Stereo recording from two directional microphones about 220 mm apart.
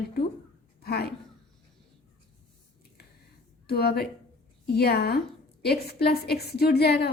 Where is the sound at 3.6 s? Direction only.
45° left (ahead or behind).